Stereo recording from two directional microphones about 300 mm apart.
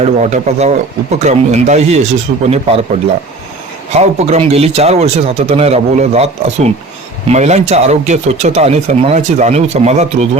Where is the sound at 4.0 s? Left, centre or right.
Right.